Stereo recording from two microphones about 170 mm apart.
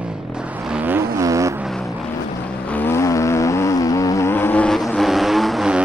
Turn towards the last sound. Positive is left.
turn(degrees=-5)  # may be behind; listen again after turning